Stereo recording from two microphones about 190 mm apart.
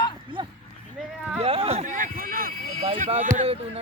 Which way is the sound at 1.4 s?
30° right (ahead or behind).